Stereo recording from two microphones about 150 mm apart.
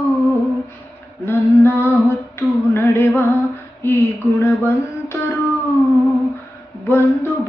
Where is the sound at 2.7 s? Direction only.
15° left (ahead or behind).